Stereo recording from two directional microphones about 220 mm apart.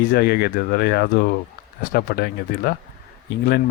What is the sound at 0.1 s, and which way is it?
Speech, 45° left (ahead or behind).